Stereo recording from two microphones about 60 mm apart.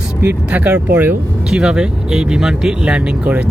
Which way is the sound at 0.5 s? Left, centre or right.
Right.